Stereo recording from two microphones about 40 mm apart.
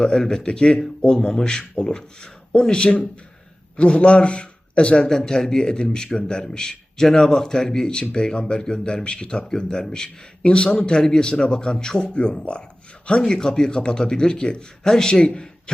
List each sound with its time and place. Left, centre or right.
0.0 s a man's voice: centre; by 5.0 s left
5.0 s a man's voice: centre